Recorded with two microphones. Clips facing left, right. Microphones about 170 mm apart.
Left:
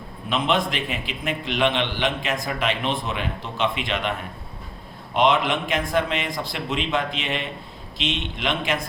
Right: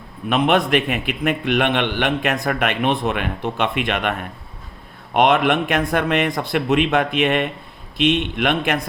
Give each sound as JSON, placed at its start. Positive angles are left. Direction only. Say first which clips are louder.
{"t": 0.3, "sound": "a man's voice", "louder": "right 6 dB", "side_deg": -60}